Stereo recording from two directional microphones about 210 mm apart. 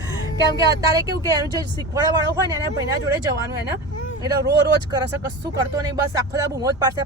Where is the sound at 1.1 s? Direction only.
15° right (ahead or behind).